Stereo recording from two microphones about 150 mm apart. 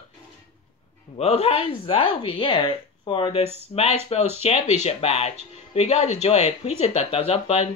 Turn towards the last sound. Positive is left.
turn(degrees=40)  # may be behind; listen again after turning